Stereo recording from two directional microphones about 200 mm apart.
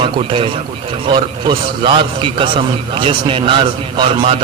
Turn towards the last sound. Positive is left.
turn(degrees=-25)  # may be behind; listen again after turning